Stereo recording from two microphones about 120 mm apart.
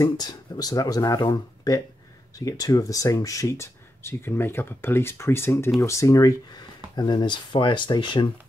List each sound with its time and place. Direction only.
0.0 s speech: 35° left (ahead or behind)